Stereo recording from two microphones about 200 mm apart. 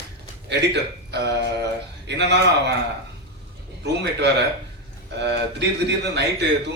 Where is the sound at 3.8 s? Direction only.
60° right (ahead or behind).